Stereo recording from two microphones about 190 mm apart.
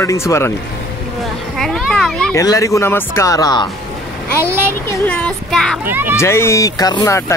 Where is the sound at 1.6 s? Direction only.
5° left (ahead or behind).